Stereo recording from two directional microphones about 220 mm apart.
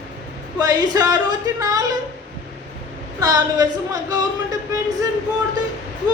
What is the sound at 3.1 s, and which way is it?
Speech, 15° right (ahead or behind).